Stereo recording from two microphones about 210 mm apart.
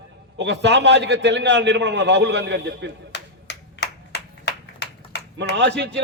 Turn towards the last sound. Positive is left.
turn(degrees=-55)  # may be behind; listen again after turning